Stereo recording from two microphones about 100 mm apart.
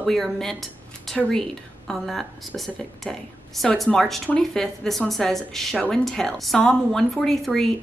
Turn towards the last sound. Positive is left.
turn(degrees=0)  # may be behind; listen again after turning